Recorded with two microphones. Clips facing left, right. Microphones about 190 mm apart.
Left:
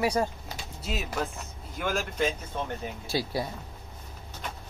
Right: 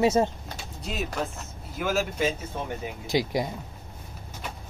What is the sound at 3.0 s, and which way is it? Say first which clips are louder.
Speech: right 5 dB; 15° right (ahead or behind).